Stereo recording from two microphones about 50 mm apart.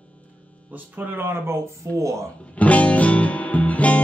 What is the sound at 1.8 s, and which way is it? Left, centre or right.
Speech, right.